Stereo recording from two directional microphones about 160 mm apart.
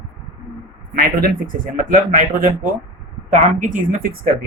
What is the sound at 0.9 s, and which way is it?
Speech, 65° right (ahead or behind).